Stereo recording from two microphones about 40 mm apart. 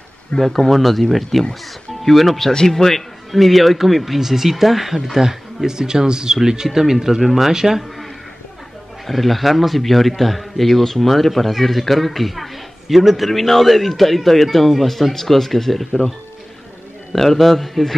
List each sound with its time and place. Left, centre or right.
0.4 s speech: centre
9.0 s speech: centre
17.1 s speech: centre